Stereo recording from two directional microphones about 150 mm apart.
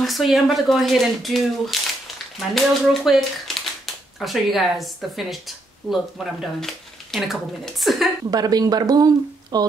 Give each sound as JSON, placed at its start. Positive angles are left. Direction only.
{"t": 0.0, "sound": "speech", "side_deg": 0}
{"t": 8.3, "sound": "speech", "side_deg": -25}